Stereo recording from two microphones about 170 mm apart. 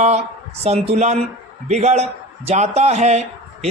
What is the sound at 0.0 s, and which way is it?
Speech, 40° right (ahead or behind).